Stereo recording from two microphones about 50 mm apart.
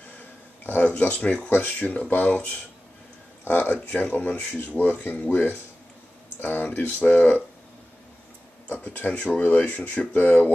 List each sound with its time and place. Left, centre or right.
0.8 s speech: left
3.4 s speech: left
6.4 s speech: left
8.7 s speech: left